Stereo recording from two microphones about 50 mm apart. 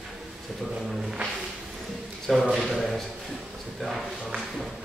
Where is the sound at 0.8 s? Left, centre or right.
Centre.